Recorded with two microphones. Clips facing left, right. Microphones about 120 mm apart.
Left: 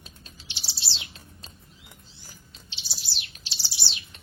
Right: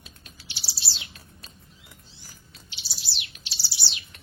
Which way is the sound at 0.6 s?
25° left (ahead or behind).